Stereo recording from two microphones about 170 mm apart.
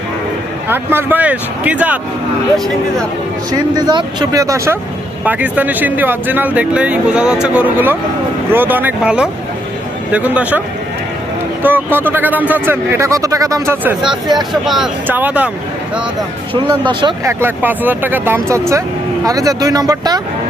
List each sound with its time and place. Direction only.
0.7 s speech: 10° right (ahead or behind)
3.8 s speech: 25° right (ahead or behind); by 10.6 s 10° right (ahead or behind)
11.6 s speech: 10° right (ahead or behind)
14.5 s speech: centre (ahead or behind)
16.6 s speech: 30° right (ahead or behind)
17.2 s speech: 10° right (ahead or behind)